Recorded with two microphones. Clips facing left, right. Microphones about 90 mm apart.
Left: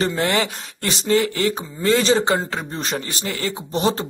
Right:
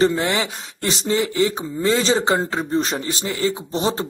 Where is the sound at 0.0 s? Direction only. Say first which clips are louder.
Right 2 dB; 20° right (ahead or behind).